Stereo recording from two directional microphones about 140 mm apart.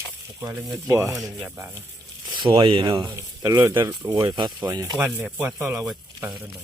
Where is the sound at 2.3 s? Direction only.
35° right (ahead or behind).